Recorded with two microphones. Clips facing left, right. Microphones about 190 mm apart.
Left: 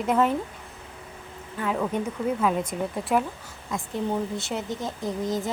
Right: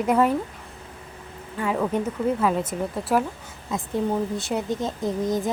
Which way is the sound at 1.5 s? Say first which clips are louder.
Right 3 dB; centre (ahead or behind).